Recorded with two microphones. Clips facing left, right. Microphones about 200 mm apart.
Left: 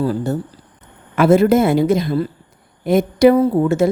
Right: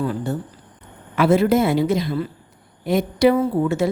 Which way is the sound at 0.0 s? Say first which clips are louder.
Left 4 dB; 35° left (ahead or behind).